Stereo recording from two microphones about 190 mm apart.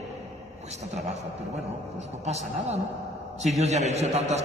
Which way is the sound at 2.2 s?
35° right (ahead or behind).